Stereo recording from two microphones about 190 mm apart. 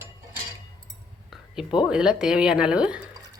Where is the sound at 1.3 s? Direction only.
5° right (ahead or behind).